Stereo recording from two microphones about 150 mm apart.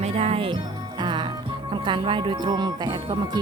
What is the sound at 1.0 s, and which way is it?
Music, 30° right (ahead or behind).